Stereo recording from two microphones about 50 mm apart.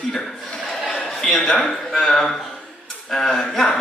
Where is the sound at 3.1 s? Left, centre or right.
Centre.